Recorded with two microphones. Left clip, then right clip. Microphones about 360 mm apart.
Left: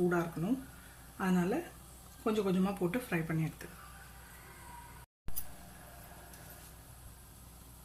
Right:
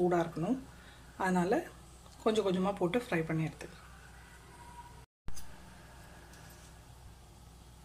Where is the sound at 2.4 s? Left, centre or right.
Centre.